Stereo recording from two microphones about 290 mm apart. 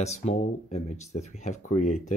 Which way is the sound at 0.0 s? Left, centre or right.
Left.